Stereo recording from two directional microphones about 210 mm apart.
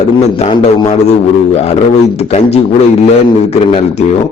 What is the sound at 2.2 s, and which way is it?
Speech, 30° left (ahead or behind).